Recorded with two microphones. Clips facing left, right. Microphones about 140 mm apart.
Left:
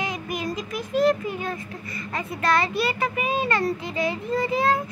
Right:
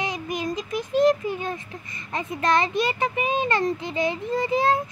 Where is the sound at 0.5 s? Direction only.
5° left (ahead or behind).